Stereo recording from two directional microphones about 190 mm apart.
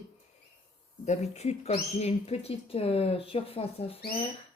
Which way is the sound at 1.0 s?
35° left (ahead or behind).